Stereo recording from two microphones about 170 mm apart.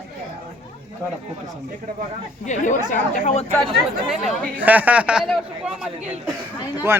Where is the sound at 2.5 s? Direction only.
50° left (ahead or behind).